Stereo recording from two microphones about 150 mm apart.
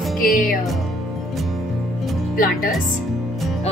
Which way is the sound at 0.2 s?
70° left (ahead or behind).